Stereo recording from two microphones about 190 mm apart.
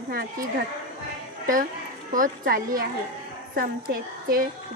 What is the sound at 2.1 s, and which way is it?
A woman's voice, 45° right (ahead or behind).